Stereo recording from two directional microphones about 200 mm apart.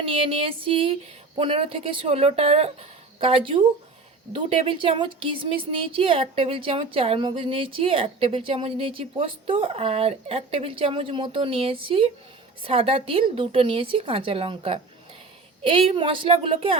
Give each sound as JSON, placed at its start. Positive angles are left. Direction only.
{"t": 0.0, "sound": "a woman's voice", "side_deg": -25}